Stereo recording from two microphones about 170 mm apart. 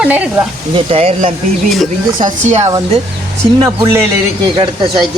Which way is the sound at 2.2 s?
45° right (ahead or behind).